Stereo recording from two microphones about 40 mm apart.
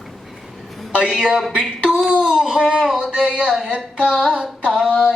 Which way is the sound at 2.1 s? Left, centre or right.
Centre.